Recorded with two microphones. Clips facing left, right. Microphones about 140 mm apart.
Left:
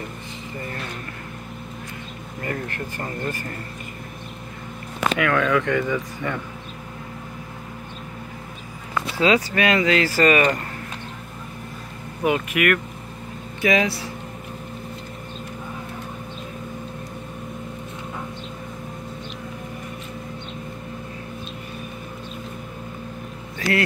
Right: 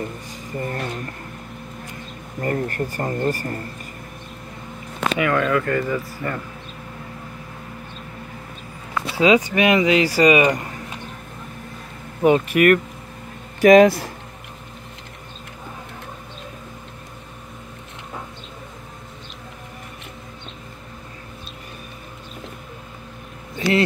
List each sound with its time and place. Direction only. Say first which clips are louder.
0.6 s a sound: right 6 dB; 40° right (ahead or behind)
2.4 s speech: right 6 dB; 35° right (ahead or behind)
5.2 s speech: right 1 dB; 5° right (ahead or behind)
9.1 s speech: right 3 dB; 15° right (ahead or behind)
12.2 s speech: right 6 dB; 35° right (ahead or behind)
13.6 s speech: right 10 dB; 45° right (ahead or behind)